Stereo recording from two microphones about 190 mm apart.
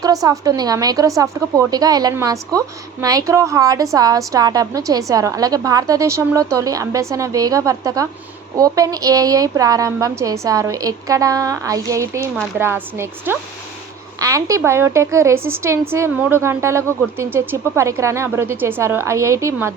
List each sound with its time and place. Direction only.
0.0 s a woman's voice: 20° right (ahead or behind)